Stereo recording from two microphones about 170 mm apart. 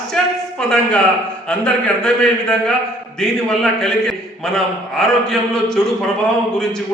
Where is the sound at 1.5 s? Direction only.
5° left (ahead or behind).